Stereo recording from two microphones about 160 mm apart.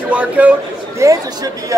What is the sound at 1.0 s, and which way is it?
Speech, 20° right (ahead or behind).